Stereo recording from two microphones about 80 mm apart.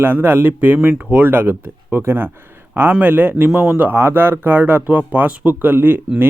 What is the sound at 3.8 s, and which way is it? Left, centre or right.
Speech, right.